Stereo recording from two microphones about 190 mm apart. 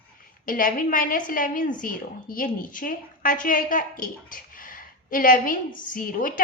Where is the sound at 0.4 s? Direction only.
45° left (ahead or behind).